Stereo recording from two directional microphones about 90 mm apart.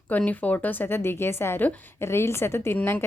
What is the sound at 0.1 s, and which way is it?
A woman's voice, 15° left (ahead or behind).